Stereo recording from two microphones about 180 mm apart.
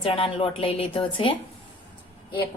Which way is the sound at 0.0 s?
30° left (ahead or behind).